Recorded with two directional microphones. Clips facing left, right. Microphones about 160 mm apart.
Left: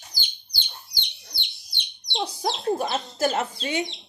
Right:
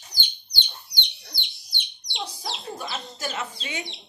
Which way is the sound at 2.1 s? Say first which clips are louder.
Left 7 dB; 45° left (ahead or behind).